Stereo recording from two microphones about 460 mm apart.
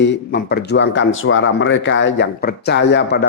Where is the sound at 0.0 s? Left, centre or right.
Left.